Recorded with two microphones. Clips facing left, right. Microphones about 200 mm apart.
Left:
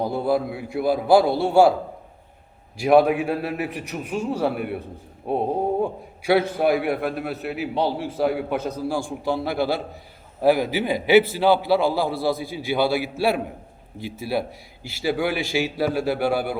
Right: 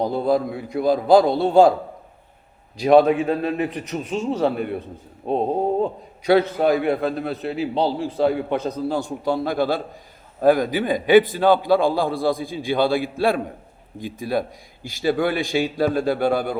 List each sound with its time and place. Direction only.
0.3 s a man's voice: 5° left (ahead or behind)
2.8 s a man's voice: 10° left (ahead or behind)
5.2 s a sound: 20° right (ahead or behind)
6.6 s a man's voice: 10° left (ahead or behind)